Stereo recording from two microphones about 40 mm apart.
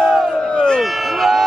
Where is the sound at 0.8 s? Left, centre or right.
Centre.